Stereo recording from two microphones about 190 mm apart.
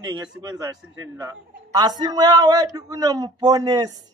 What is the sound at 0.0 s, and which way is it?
A man's voice, 20° right (ahead or behind).